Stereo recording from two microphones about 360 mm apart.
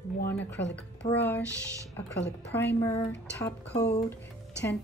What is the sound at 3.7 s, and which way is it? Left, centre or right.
Speech, centre.